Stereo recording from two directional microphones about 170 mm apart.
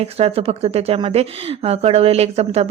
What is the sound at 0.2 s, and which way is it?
Speech, 35° right (ahead or behind).